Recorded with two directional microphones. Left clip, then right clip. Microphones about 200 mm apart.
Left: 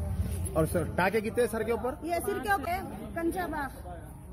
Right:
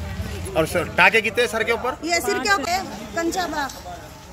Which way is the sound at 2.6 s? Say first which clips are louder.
Right 9 dB; centre (ahead or behind).